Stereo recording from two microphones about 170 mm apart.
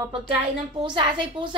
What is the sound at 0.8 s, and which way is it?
Speech, 30° right (ahead or behind).